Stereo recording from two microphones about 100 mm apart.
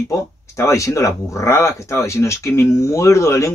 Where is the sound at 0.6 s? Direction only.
30° left (ahead or behind).